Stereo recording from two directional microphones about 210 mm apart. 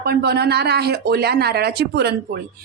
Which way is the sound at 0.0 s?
50° right (ahead or behind).